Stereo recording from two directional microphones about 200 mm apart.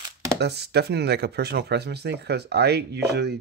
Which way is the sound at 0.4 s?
55° right (ahead or behind).